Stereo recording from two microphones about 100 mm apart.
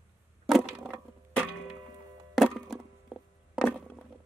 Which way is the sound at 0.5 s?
5° right (ahead or behind).